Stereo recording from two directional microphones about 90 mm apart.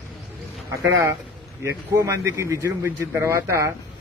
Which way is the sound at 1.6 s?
35° right (ahead or behind).